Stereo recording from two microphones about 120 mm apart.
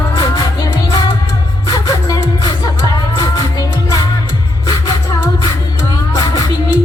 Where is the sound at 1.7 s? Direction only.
30° left (ahead or behind).